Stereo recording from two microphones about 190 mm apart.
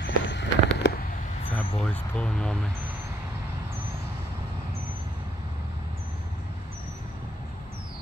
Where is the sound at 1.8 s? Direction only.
5° left (ahead or behind).